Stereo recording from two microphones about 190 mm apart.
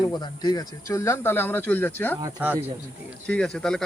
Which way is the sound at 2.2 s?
10° right (ahead or behind).